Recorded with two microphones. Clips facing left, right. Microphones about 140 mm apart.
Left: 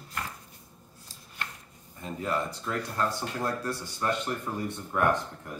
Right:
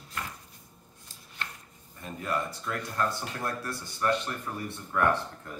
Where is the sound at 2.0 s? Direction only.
30° left (ahead or behind).